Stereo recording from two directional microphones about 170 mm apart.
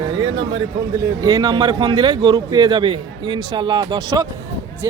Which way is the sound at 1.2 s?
20° right (ahead or behind).